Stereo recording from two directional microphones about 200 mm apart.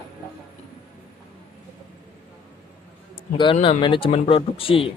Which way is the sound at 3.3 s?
25° left (ahead or behind).